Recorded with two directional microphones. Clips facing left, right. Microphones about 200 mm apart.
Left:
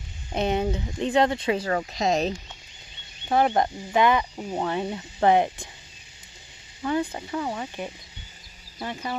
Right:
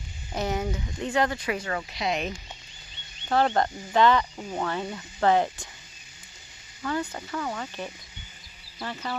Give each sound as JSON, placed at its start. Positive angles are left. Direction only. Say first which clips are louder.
{"t": 0.3, "sound": "speech", "louder": "left 4 dB", "side_deg": 25}
{"t": 3.2, "sound": "speech", "louder": "left 2 dB", "side_deg": 15}
{"t": 6.8, "sound": "speech", "louder": "left 4 dB", "side_deg": 20}